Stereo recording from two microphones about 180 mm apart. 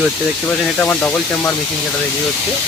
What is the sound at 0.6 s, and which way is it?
Speech, 5° left (ahead or behind).